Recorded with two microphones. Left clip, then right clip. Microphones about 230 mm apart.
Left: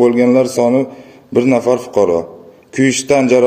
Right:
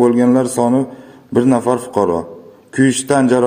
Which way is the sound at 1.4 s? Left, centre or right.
Right.